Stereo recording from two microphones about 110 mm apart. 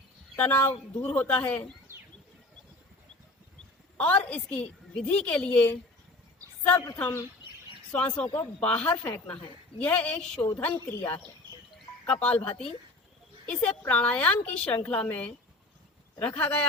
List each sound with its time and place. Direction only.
0.3 s a woman's voice: 20° left (ahead or behind)
3.9 s a woman's voice: 15° left (ahead or behind)
13.5 s a woman's voice: 15° left (ahead or behind)